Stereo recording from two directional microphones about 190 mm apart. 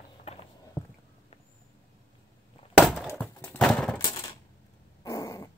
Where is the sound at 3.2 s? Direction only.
5° left (ahead or behind).